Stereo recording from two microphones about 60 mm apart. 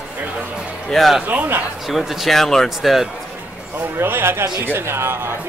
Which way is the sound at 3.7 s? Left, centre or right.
Right.